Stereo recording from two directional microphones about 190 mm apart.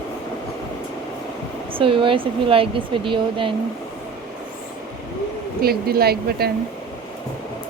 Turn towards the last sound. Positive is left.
turn(degrees=-55)  # may be behind; listen again after turning